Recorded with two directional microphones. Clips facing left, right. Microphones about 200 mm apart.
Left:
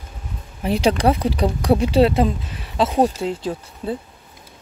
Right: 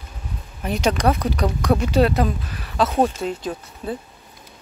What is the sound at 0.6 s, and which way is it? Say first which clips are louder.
Speech: left 3 dB; 30° left (ahead or behind).